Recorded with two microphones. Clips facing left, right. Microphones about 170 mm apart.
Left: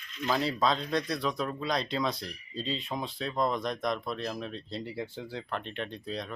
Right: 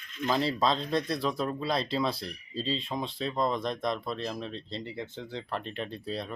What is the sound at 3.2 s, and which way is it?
Speech, centre (ahead or behind).